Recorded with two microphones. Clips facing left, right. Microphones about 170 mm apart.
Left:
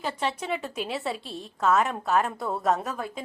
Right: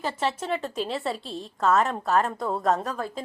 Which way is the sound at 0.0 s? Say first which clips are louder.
Right 2 dB; centre (ahead or behind).